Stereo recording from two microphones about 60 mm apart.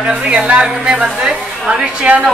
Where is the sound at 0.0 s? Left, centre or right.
Centre.